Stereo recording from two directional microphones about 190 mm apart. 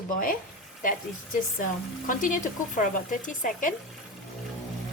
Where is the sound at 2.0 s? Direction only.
45° left (ahead or behind).